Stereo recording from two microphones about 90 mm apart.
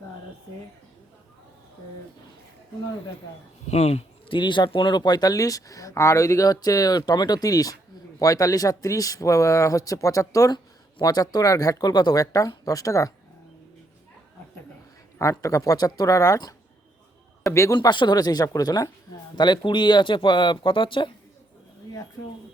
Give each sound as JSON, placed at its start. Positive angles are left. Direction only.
{"t": 4.3, "sound": "speech", "side_deg": 60}
{"t": 10.5, "sound": "speech", "side_deg": 50}
{"t": 15.2, "sound": "speech", "side_deg": 35}
{"t": 17.5, "sound": "speech", "side_deg": 35}
{"t": 17.7, "sound": "speech", "side_deg": 55}
{"t": 19.4, "sound": "speech", "side_deg": 60}